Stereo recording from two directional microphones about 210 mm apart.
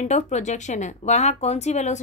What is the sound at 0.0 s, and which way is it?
Speech, 35° left (ahead or behind).